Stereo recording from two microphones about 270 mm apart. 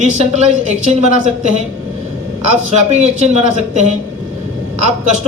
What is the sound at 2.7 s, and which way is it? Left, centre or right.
A woman's voice, right.